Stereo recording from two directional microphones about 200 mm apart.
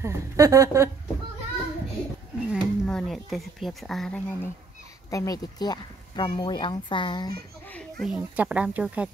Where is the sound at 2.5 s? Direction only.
Centre (ahead or behind).